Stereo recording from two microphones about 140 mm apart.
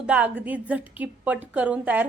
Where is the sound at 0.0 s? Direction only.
10° right (ahead or behind).